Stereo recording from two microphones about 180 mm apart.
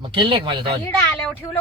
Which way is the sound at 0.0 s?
25° right (ahead or behind).